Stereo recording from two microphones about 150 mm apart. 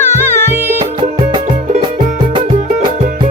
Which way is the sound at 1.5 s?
55° right (ahead or behind).